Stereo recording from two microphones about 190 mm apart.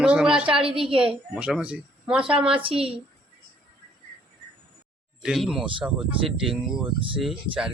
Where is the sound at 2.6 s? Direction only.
30° right (ahead or behind).